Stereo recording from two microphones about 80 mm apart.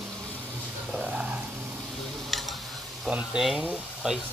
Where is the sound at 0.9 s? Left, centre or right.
Centre.